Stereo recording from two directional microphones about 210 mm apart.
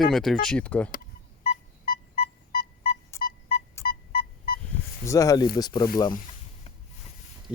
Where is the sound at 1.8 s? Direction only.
45° left (ahead or behind).